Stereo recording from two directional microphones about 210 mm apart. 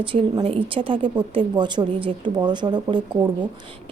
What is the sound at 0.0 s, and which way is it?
A woman's voice, 25° right (ahead or behind).